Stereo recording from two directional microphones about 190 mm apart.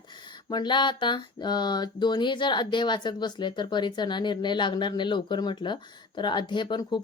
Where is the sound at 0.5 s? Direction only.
25° left (ahead or behind).